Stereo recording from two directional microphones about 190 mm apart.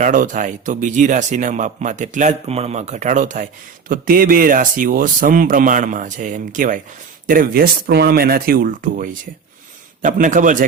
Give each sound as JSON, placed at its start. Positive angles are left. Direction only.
{"t": 0.0, "sound": "speech", "side_deg": -45}